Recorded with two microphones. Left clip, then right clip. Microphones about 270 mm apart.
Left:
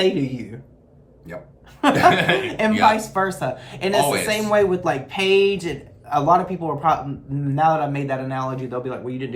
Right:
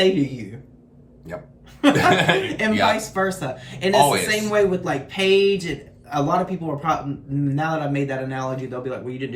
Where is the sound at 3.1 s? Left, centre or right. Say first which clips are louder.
Left 1 dB; centre.